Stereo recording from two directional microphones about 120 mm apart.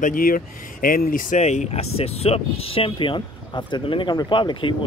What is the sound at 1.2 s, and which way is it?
Speech, 75° left (ahead or behind).